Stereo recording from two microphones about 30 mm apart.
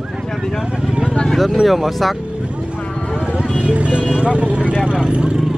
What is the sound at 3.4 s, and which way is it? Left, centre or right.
Speech, right.